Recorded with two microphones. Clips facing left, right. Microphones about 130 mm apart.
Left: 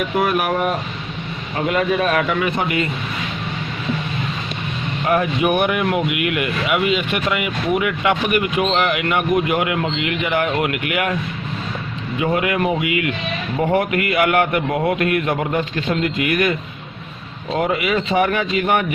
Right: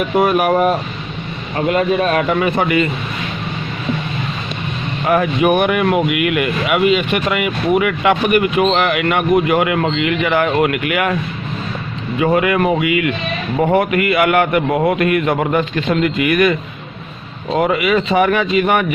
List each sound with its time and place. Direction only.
0.2 s a man's voice: 40° right (ahead or behind)
5.0 s speech: 60° right (ahead or behind)
12.2 s speech: 55° right (ahead or behind)
14.1 s speech: 65° right (ahead or behind)
17.6 s speech: 75° right (ahead or behind)